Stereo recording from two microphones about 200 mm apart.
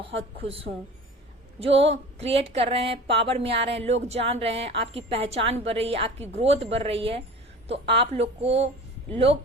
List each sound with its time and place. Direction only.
0.2 s a woman's voice: 30° right (ahead or behind)